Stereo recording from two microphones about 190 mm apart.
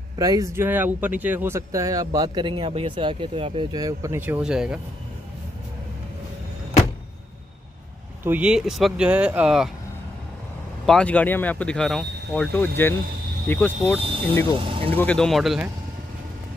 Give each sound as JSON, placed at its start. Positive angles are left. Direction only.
{"t": 0.2, "sound": "speech", "side_deg": -15}
{"t": 8.2, "sound": "speech", "side_deg": -10}
{"t": 10.9, "sound": "speech", "side_deg": 5}
{"t": 14.6, "sound": "speech", "side_deg": -25}
{"t": 15.0, "sound": "speech", "side_deg": 5}